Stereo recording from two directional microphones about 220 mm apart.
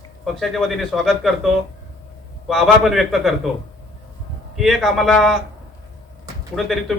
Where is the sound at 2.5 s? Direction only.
Centre (ahead or behind).